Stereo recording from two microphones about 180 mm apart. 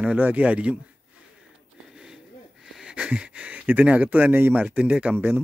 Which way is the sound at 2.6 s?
5° right (ahead or behind).